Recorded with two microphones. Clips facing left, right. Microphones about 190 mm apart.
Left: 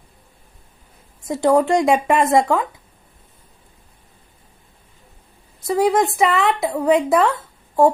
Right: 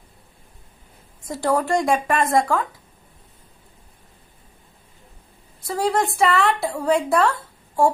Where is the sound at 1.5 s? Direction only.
20° left (ahead or behind).